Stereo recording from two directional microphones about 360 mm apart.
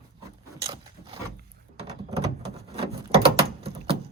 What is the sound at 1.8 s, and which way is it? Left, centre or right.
Door, centre.